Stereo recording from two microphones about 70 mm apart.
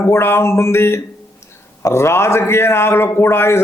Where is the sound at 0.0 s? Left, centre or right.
Left.